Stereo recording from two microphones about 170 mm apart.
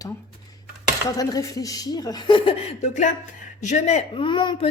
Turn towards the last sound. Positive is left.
turn(degrees=25)  # may be behind; listen again after turning